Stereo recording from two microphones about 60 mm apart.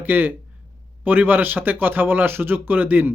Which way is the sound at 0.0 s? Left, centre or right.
Right.